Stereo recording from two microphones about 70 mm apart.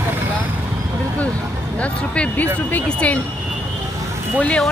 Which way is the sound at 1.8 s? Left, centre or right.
Centre.